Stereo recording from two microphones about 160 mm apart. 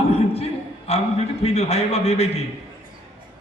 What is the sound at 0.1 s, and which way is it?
A man's voice, 40° left (ahead or behind).